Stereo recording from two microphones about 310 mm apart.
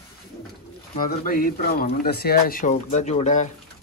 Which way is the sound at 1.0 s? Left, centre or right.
Left.